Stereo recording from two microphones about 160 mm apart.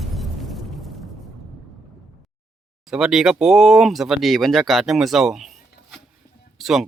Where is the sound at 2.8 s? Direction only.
5° right (ahead or behind).